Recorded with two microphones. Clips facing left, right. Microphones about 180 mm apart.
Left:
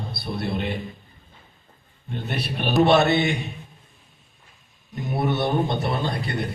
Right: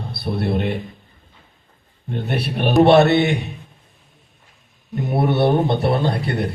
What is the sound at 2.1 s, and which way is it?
A man's voice, 60° right (ahead or behind).